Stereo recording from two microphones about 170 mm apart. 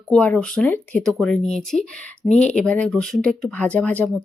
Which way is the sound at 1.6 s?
5° left (ahead or behind).